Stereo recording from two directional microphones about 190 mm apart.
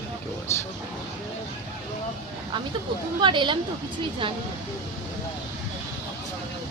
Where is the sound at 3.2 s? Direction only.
25° right (ahead or behind).